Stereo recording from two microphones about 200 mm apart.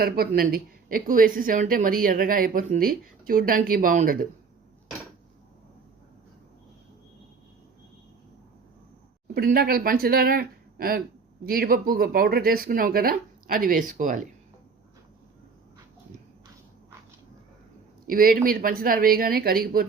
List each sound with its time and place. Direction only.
0.0 s a woman's voice: 50° right (ahead or behind)
9.2 s a woman's voice: 50° right (ahead or behind)
18.1 s a woman's voice: 45° right (ahead or behind)